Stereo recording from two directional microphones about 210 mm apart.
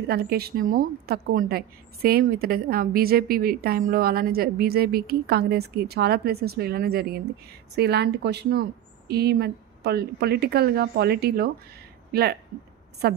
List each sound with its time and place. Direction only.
0.1 s a woman's voice: 50° right (ahead or behind)